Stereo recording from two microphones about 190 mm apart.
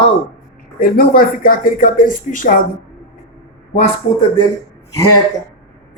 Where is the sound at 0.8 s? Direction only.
50° left (ahead or behind).